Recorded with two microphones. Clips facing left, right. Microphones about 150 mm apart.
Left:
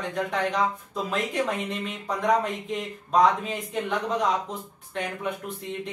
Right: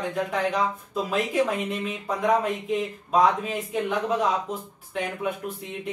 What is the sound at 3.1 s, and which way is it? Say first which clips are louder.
Speech: even; centre (ahead or behind).